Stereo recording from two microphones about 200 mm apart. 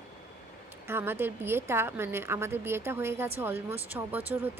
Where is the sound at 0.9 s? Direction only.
10° right (ahead or behind).